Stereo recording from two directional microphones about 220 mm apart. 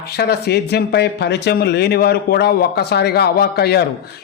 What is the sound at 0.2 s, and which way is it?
Speech, 45° left (ahead or behind).